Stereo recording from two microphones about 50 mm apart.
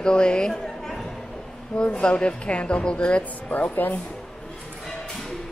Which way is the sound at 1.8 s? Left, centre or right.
Centre.